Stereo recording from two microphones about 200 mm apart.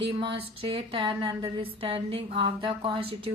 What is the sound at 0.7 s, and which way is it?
Speech, 25° right (ahead or behind).